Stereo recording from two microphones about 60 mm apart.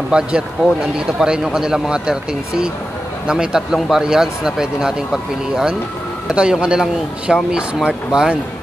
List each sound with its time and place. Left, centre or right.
0.1 s a man's voice: centre